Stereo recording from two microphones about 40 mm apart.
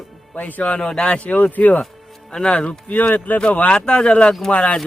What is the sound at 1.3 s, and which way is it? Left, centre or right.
Speech, left.